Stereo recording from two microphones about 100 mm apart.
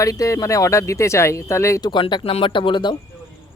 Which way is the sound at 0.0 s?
35° left (ahead or behind).